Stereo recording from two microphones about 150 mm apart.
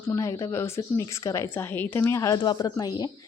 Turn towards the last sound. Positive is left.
turn(degrees=25)  # may be behind; listen again after turning